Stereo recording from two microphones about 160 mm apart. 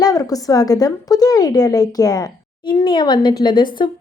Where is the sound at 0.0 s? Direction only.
25° left (ahead or behind).